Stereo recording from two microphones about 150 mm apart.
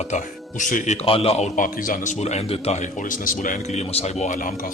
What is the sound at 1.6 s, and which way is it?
Speech, 65° left (ahead or behind).